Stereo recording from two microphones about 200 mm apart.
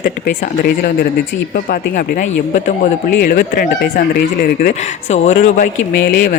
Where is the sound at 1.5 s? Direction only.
45° left (ahead or behind).